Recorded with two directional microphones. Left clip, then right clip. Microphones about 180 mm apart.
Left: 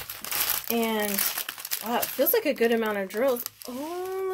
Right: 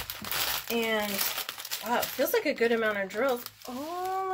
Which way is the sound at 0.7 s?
55° left (ahead or behind).